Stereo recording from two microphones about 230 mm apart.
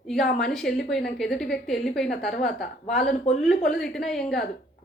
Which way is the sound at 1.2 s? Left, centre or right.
Centre.